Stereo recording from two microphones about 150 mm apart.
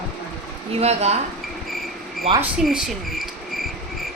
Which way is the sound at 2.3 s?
40° right (ahead or behind).